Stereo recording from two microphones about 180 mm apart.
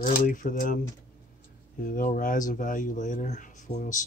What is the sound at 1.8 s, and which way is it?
Speech, 50° left (ahead or behind).